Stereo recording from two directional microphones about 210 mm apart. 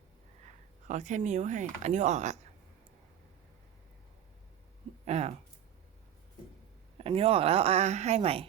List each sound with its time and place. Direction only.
0.9 s speech: 35° right (ahead or behind)
5.0 s speech: 30° right (ahead or behind)
7.0 s speech: 25° right (ahead or behind)